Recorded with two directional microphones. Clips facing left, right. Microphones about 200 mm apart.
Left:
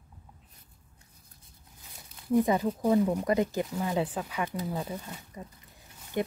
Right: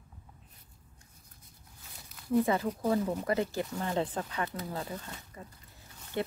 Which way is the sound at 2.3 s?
15° left (ahead or behind).